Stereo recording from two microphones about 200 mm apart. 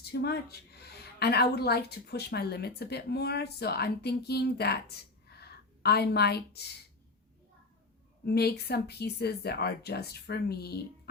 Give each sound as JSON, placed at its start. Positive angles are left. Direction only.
{"t": 0.0, "sound": "a woman's voice", "side_deg": 55}
{"t": 5.3, "sound": "a sound", "side_deg": 55}
{"t": 8.2, "sound": "a woman's voice", "side_deg": 50}